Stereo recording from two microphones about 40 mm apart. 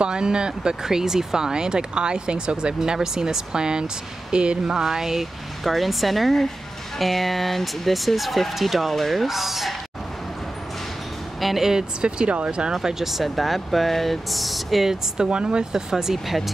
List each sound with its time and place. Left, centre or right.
0.0 s speech: right
5.6 s speech: centre
11.4 s speech: centre
12.0 s speech: right
12.7 s speech: centre
15.1 s speech: right